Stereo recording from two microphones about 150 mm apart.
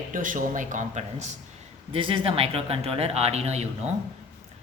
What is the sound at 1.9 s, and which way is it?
Speech, 35° right (ahead or behind).